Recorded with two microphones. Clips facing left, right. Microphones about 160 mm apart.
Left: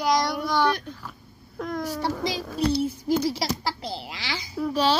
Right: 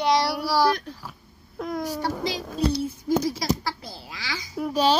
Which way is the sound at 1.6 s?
10° right (ahead or behind).